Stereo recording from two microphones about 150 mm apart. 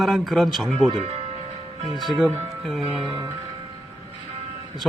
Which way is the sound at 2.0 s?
Centre (ahead or behind).